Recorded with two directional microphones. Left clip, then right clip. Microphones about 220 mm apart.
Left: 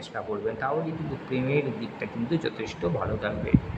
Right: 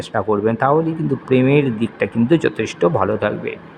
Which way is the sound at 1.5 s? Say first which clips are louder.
Right 11 dB; 30° right (ahead or behind).